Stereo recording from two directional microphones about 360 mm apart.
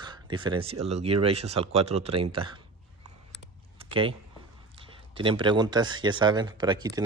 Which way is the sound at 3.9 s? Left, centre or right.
Centre.